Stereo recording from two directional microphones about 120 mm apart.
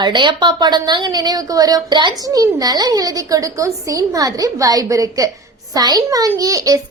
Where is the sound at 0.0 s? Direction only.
40° right (ahead or behind).